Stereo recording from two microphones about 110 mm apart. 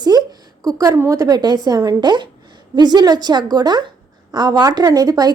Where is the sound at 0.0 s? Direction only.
35° right (ahead or behind).